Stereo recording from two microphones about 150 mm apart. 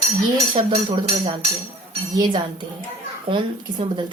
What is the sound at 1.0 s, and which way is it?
A woman's voice, 30° right (ahead or behind).